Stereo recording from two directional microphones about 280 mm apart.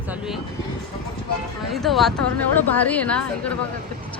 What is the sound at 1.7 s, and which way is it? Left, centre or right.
Speech, centre.